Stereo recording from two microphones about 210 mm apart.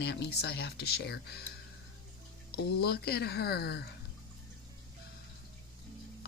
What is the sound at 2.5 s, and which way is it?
Speech, 50° left (ahead or behind).